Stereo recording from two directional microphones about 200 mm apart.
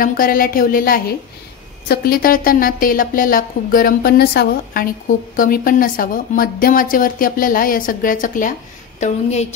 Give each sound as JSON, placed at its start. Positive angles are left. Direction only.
{"t": 0.0, "sound": "a woman's voice", "side_deg": 45}